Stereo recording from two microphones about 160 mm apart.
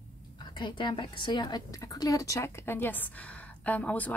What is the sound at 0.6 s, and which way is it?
A woman's voice, 30° left (ahead or behind).